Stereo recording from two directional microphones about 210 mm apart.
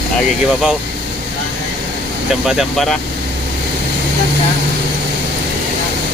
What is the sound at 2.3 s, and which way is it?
Speech, centre (ahead or behind).